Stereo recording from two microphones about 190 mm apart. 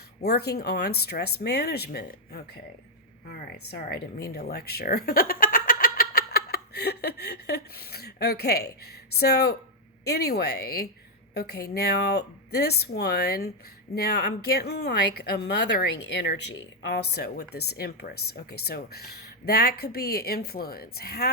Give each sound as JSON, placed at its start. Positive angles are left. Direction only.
{"t": 0.2, "sound": "a woman's voice", "side_deg": 55}